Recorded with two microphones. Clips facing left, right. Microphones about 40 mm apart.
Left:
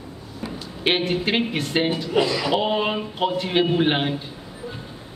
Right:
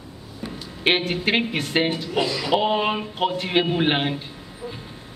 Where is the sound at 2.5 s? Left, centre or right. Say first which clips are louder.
Right 1 dB; centre.